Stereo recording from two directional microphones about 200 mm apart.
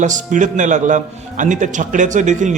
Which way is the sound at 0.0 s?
40° right (ahead or behind).